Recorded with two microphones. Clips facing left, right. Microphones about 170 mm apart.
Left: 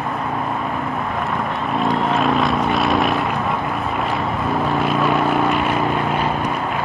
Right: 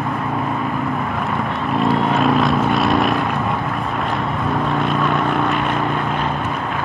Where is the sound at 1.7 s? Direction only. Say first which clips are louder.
Right 2 dB; centre (ahead or behind).